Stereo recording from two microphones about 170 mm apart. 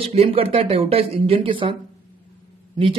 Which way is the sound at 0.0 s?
35° right (ahead or behind).